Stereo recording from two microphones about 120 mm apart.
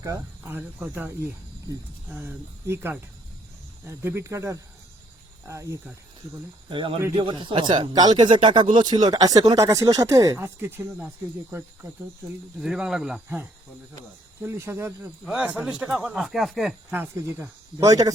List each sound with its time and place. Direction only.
0.4 s speech: 15° right (ahead or behind)
6.7 s speech: 45° right (ahead or behind); by 11.1 s 20° right (ahead or behind)
12.5 s speech: 5° right (ahead or behind)
13.2 s speech: 15° right (ahead or behind)
15.2 s speech: 10° right (ahead or behind)
16.9 s speech: 20° right (ahead or behind)